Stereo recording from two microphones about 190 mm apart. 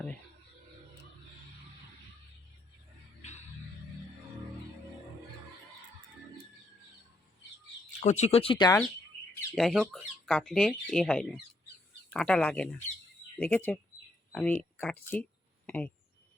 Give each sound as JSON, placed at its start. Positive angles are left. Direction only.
{"t": 3.2, "sound": "music", "side_deg": 35}
{"t": 7.9, "sound": "speech", "side_deg": 40}
{"t": 9.6, "sound": "speech", "side_deg": 0}